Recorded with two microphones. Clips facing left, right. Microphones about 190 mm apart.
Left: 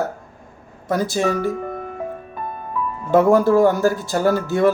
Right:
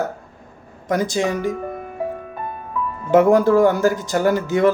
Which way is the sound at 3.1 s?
15° right (ahead or behind).